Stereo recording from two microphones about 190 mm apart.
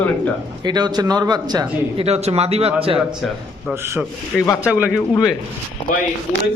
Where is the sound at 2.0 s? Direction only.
35° right (ahead or behind).